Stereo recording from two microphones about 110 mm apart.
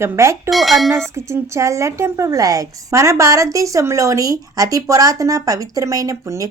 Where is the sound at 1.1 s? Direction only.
25° right (ahead or behind).